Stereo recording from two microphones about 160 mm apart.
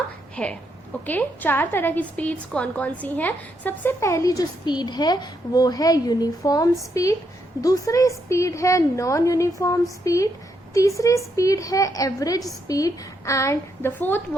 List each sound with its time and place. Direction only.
0.4 s a woman's voice: 5° left (ahead or behind)